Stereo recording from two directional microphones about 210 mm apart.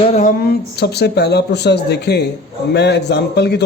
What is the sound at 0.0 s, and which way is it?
Speech, 30° left (ahead or behind).